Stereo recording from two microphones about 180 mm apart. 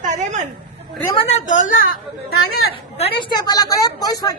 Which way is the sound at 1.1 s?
40° left (ahead or behind).